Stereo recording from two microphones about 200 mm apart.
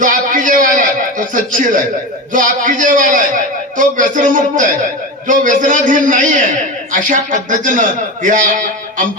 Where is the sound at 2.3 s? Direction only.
40° right (ahead or behind).